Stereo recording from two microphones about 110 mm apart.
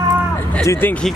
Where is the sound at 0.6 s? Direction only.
25° left (ahead or behind).